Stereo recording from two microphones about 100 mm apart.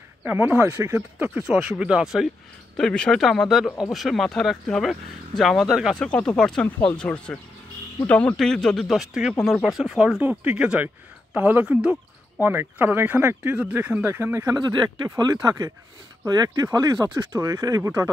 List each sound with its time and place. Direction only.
0.2 s speech: 20° right (ahead or behind); by 2.3 s 5° right (ahead or behind)
2.8 s speech: 5° left (ahead or behind)
6.0 s speech: 10° left (ahead or behind); by 14.4 s 25° right (ahead or behind)
14.4 s speech: 40° right (ahead or behind)